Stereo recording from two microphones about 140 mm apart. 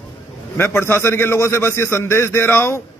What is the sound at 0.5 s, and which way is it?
A man's voice, 15° left (ahead or behind).